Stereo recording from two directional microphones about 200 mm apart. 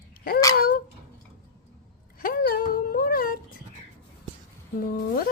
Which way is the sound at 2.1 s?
45° left (ahead or behind).